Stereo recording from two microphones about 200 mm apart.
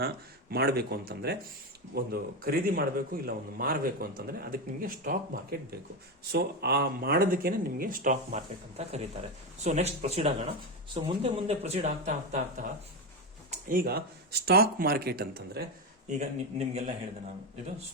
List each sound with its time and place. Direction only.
0.5 s a man's voice: 50° right (ahead or behind); by 8.4 s 35° right (ahead or behind)
9.6 s a man's voice: 35° right (ahead or behind); by 15.6 s 50° right (ahead or behind)
16.0 s speech: 35° right (ahead or behind)